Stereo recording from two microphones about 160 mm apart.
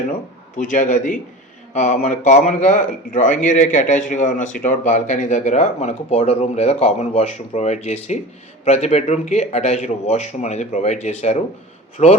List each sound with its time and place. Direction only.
0.5 s speech: 50° left (ahead or behind)